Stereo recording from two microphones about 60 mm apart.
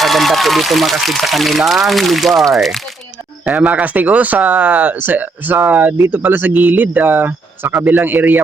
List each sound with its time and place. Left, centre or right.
0.0 s speech: centre
3.5 s speech: centre